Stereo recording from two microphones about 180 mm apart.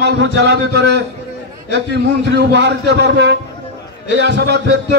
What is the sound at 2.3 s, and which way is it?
A man's voice, 70° right (ahead or behind).